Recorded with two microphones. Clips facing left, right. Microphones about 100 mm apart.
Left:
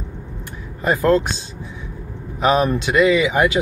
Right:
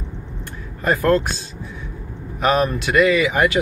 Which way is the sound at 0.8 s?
15° left (ahead or behind).